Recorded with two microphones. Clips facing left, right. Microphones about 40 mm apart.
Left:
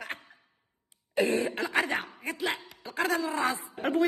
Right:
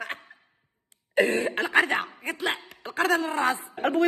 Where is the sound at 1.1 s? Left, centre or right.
Right.